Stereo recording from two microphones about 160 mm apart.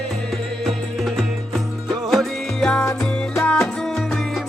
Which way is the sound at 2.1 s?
Centre (ahead or behind).